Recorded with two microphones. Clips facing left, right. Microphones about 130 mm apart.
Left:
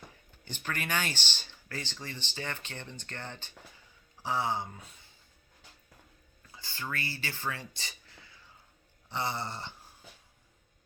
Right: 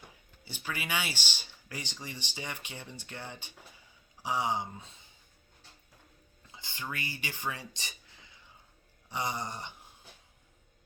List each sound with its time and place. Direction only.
0.4 s speech: 10° right (ahead or behind)
6.5 s speech: 20° right (ahead or behind)
9.0 s a sound: 15° right (ahead or behind)